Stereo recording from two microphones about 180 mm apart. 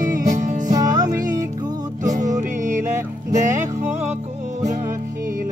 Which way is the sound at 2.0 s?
45° right (ahead or behind).